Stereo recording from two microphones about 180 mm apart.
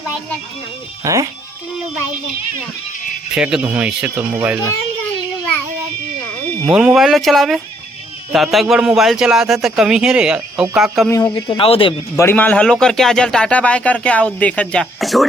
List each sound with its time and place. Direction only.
1.0 s speech: 20° right (ahead or behind)
3.3 s speech: 5° right (ahead or behind)
6.7 s speech: 5° right (ahead or behind)
11.1 s speech: 25° left (ahead or behind)
12.1 s speech: 15° left (ahead or behind)